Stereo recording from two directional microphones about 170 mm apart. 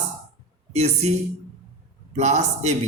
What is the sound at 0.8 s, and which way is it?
Speech, 40° right (ahead or behind).